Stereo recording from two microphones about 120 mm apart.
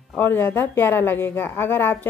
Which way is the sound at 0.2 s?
15° left (ahead or behind).